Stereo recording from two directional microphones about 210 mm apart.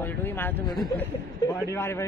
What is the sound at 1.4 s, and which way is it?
Speech, 15° left (ahead or behind).